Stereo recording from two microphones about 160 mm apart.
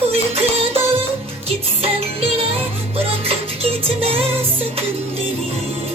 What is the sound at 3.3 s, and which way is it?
Music, 35° right (ahead or behind).